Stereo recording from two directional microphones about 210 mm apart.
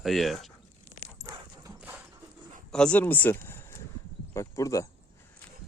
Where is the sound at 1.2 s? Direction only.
15° right (ahead or behind).